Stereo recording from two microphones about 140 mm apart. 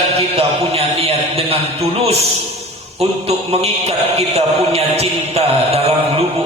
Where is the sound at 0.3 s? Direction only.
45° right (ahead or behind).